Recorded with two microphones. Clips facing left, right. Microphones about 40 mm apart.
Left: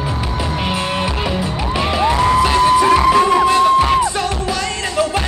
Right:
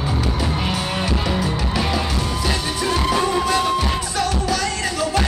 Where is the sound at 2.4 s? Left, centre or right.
Left.